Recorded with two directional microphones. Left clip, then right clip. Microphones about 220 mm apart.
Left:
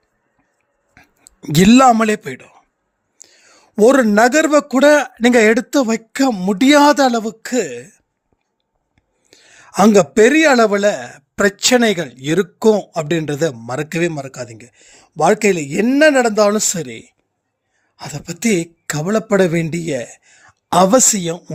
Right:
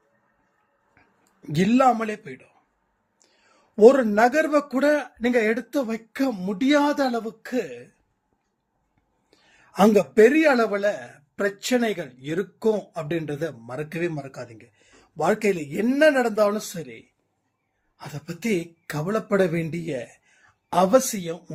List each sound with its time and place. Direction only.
1.4 s a man's voice: 50° left (ahead or behind)
9.3 s a man's voice: 45° left (ahead or behind)